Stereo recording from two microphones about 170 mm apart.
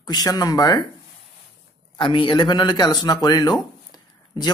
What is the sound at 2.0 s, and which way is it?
Speech, 30° left (ahead or behind).